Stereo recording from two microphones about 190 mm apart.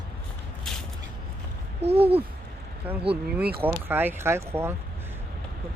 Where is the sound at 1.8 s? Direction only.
30° right (ahead or behind).